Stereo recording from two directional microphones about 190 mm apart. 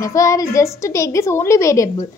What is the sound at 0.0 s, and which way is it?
A woman's voice, 15° left (ahead or behind).